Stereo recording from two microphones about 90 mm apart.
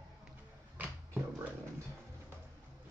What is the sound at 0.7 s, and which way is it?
Music, 20° right (ahead or behind).